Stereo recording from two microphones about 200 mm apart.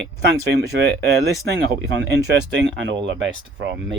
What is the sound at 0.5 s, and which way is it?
Speech, 55° right (ahead or behind).